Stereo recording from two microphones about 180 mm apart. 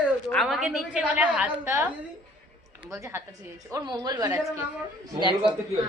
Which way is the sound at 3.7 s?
20° right (ahead or behind).